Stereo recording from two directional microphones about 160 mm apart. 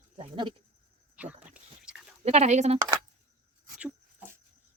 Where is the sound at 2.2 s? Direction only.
45° right (ahead or behind).